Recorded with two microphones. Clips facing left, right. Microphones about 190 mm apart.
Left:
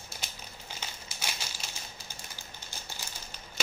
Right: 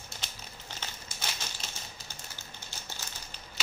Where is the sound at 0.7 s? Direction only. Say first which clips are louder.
Even; 10° left (ahead or behind).